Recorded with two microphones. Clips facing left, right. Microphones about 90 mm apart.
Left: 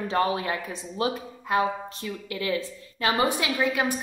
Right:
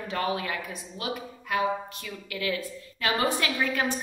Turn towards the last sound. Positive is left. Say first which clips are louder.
# left 2 dB
turn(degrees=15)  # may be behind; listen again after turning